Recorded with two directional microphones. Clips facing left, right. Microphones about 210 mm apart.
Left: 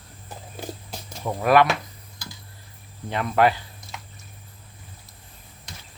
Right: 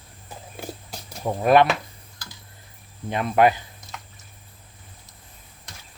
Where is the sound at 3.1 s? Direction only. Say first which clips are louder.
Right 2 dB; 20° right (ahead or behind).